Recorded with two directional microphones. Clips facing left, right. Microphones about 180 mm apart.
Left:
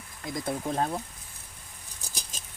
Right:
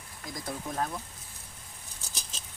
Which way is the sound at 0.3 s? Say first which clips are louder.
Left 6 dB; 25° left (ahead or behind).